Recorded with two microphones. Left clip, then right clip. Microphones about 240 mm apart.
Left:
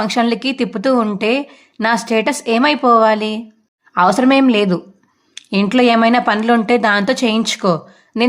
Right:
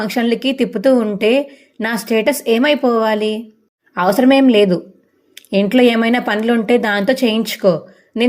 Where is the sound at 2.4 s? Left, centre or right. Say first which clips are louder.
Left 1 dB; left.